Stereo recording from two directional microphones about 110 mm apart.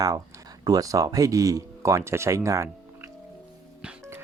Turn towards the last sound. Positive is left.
turn(degrees=-25)  # may be behind; listen again after turning